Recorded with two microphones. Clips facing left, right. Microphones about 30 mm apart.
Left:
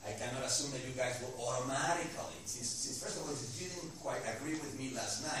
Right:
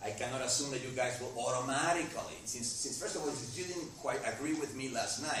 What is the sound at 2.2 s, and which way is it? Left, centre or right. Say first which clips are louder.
Speech: right 2 dB; centre.